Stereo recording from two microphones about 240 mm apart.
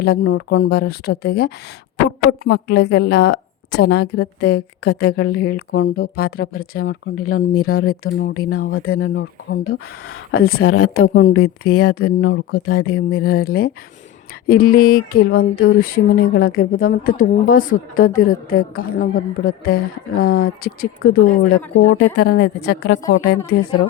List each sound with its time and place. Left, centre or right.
0.0 s a woman's voice: left
6.8 s speech: left
8.2 s speech: left
8.7 s speech: left
10.6 s speech: left
11.3 s speech: left
12.8 s speech: left